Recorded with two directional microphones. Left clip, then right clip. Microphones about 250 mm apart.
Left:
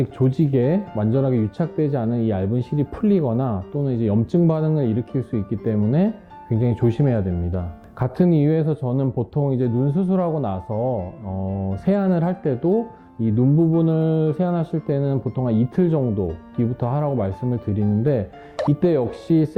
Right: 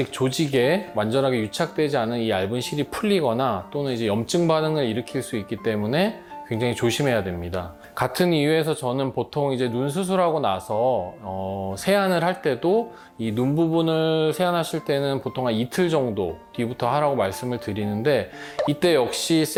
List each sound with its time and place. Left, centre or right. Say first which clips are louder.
0.0 s speech: left 1 dB; centre
10.7 s speech: right 2 dB; right
11.7 s speech: right 2 dB; centre